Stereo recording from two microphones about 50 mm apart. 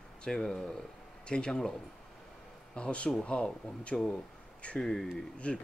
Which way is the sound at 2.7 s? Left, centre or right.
Left.